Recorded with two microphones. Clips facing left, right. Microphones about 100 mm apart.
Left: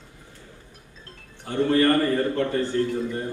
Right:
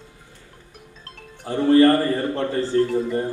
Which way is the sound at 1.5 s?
35° right (ahead or behind).